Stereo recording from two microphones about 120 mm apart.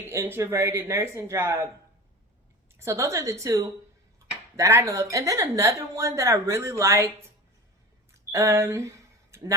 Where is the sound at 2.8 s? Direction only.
25° right (ahead or behind).